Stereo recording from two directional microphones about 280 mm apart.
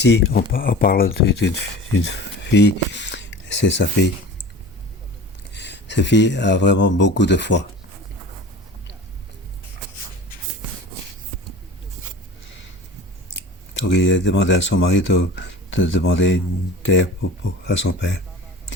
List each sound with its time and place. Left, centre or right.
0.0 s speech: left
5.5 s speech: left
13.3 s speech: left